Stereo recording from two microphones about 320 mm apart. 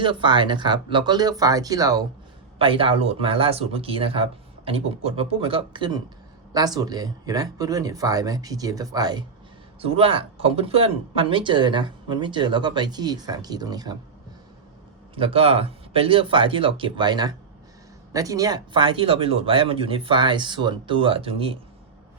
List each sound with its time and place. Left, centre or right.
0.0 s speech: centre
15.1 s speech: centre